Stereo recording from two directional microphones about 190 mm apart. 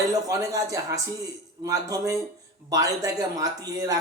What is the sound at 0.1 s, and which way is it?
A man's voice, 15° right (ahead or behind).